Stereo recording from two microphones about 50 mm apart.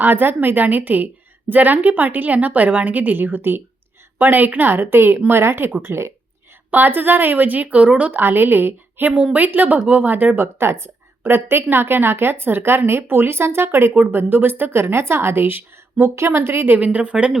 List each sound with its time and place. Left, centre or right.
0.0 s a woman's voice: right
6.7 s a woman's voice: right
8.1 s a woman's voice: right
10.0 s a woman's voice: right
16.7 s speech: right